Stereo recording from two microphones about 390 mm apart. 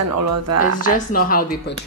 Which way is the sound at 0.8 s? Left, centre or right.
Left.